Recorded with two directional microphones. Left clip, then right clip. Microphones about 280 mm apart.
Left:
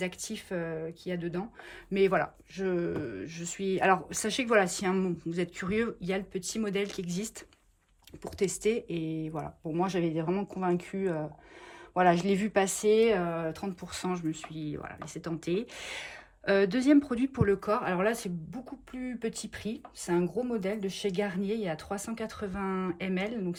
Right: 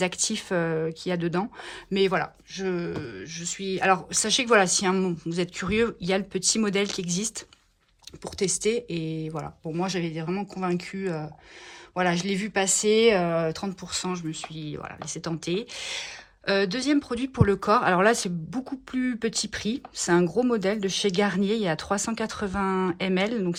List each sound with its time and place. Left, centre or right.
0.0 s speech: centre
1.9 s speech: centre